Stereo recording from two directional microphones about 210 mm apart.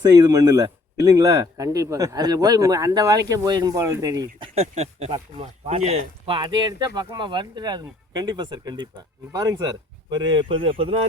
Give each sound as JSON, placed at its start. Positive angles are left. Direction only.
{"t": 0.0, "sound": "speech", "side_deg": -20}
{"t": 4.4, "sound": "speech", "side_deg": -30}